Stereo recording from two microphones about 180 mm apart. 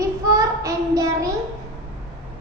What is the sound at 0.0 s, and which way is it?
Child singing, 20° right (ahead or behind).